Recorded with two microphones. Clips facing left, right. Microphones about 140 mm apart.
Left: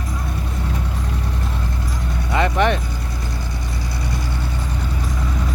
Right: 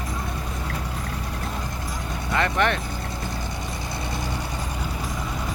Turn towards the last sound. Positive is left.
turn(degrees=-20)  # may be behind; listen again after turning